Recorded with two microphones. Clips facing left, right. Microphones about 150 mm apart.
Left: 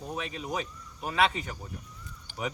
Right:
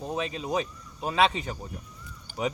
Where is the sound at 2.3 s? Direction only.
45° right (ahead or behind).